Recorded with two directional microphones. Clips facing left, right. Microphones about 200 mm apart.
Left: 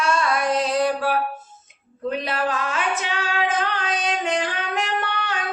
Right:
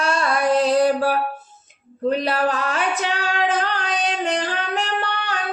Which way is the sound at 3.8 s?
35° right (ahead or behind).